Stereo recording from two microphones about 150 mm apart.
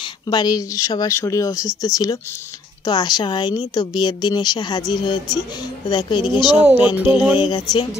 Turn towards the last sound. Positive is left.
turn(degrees=30)  # may be behind; listen again after turning